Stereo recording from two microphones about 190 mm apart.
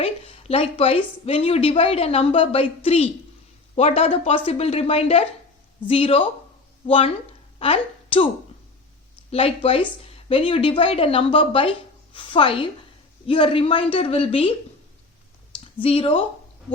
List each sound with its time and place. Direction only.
0.0 s a woman's voice: 30° left (ahead or behind)
9.3 s a woman's voice: 30° left (ahead or behind)
15.5 s speech: 30° left (ahead or behind)